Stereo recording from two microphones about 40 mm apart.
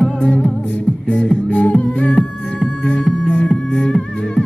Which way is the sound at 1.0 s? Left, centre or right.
Left.